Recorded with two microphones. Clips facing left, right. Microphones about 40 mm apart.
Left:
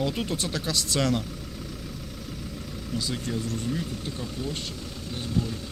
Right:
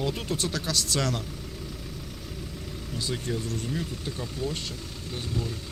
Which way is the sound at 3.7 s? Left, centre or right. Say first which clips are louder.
Left 1 dB; right.